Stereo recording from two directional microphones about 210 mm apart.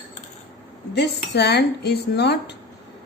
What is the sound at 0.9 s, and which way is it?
Speech, 55° left (ahead or behind).